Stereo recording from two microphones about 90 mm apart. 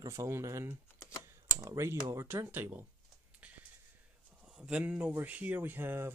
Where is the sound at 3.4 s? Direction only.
15° right (ahead or behind).